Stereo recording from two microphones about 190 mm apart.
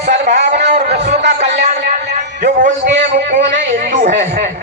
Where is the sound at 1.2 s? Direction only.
65° right (ahead or behind).